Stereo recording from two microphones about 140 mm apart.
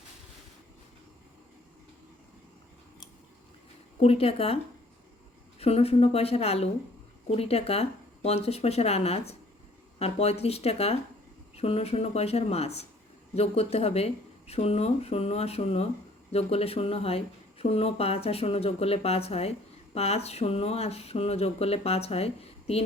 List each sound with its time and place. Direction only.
4.0 s speech: 45° left (ahead or behind)